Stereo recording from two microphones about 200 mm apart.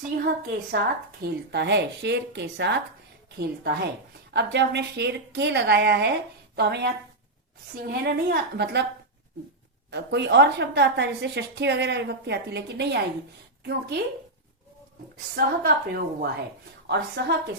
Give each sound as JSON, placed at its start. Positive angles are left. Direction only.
{"t": 0.2, "sound": "a woman's voice", "side_deg": -50}
{"t": 9.9, "sound": "a woman's voice", "side_deg": -60}
{"t": 15.4, "sound": "a woman's voice", "side_deg": -50}